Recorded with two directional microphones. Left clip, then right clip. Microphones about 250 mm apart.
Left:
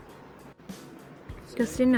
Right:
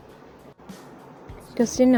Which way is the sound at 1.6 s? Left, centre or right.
Centre.